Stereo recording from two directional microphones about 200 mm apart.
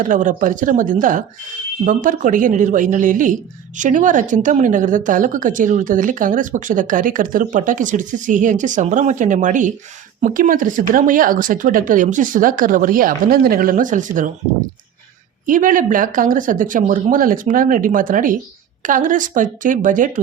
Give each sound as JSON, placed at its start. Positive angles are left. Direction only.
{"t": 0.0, "sound": "speech", "side_deg": -40}
{"t": 15.4, "sound": "speech", "side_deg": -40}